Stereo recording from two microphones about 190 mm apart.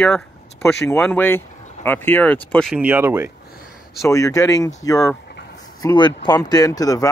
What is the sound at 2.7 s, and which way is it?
Speech, 5° right (ahead or behind).